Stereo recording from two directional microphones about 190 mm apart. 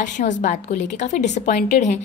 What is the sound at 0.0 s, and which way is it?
A woman's voice, 40° left (ahead or behind).